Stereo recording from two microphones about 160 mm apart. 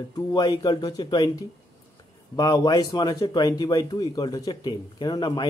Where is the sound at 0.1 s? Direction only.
25° left (ahead or behind).